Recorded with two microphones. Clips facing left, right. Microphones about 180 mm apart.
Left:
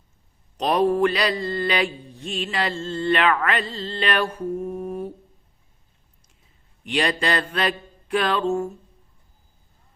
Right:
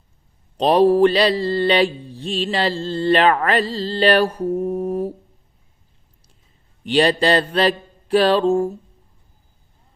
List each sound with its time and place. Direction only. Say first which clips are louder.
0.5 s mantra: right 6 dB; 30° right (ahead or behind)
6.8 s mantra: right 7 dB; 30° right (ahead or behind)